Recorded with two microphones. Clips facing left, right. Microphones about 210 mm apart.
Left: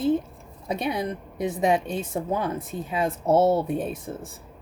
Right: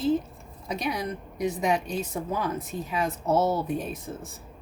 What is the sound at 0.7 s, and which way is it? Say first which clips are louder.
A woman's voice: left 3 dB; 30° left (ahead or behind).